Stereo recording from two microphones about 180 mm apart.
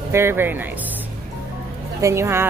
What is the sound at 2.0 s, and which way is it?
Speech, 15° right (ahead or behind).